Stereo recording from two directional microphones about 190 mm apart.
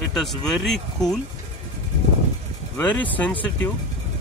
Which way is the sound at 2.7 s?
10° left (ahead or behind).